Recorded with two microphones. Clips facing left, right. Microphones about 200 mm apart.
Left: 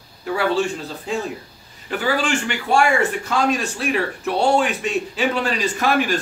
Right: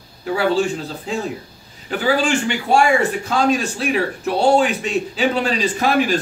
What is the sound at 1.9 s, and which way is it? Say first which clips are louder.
A man's voice: right 3 dB; 35° right (ahead or behind).